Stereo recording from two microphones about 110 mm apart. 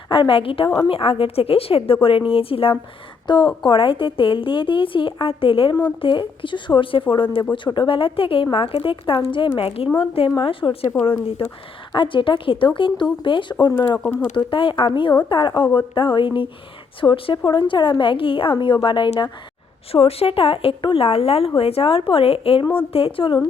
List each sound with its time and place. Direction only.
0.1 s a woman's voice: 50° left (ahead or behind)
3.2 s a woman's voice: 45° left (ahead or behind)
11.9 s a woman's voice: 50° left (ahead or behind)
14.3 s a woman's voice: 50° left (ahead or behind)
19.9 s a woman's voice: 60° left (ahead or behind)
22.6 s a woman's voice: 20° left (ahead or behind)
22.9 s a woman's voice: 60° left (ahead or behind)